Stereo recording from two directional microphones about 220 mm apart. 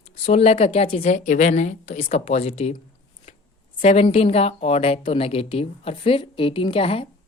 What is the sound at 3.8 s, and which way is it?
Speech, 25° left (ahead or behind).